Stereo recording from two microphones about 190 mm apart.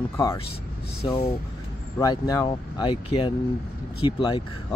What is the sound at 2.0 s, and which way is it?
Speech, 20° left (ahead or behind).